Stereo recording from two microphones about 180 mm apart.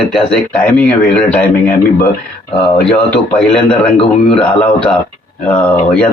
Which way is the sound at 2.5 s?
30° left (ahead or behind).